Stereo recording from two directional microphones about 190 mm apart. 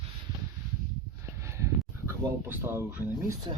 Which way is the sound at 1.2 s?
15° right (ahead or behind).